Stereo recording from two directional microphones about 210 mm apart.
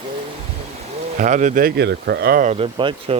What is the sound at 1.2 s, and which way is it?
Speech, 40° right (ahead or behind).